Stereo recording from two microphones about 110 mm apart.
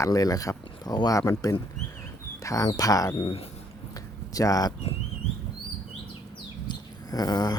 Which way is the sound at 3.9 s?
35° left (ahead or behind).